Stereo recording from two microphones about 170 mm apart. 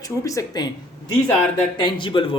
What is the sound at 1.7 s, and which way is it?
Speech, 25° left (ahead or behind).